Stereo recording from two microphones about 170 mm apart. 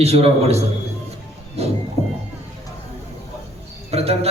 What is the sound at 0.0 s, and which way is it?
A man's voice, 35° right (ahead or behind).